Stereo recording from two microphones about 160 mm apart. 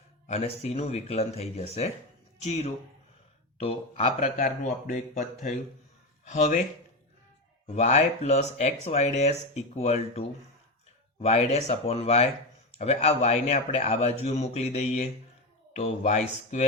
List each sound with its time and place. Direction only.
0.3 s speech: 40° left (ahead or behind)
3.6 s speech: 40° left (ahead or behind)
7.8 s speech: 45° left (ahead or behind)